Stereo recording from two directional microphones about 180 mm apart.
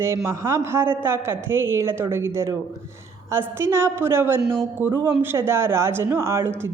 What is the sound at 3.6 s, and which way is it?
A woman's voice, 15° right (ahead or behind).